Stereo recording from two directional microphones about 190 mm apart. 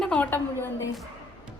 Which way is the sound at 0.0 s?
5° left (ahead or behind).